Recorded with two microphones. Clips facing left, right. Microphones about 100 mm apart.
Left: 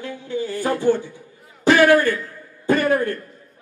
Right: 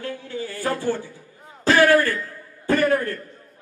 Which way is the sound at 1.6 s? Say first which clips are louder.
Left 2 dB; 20° left (ahead or behind).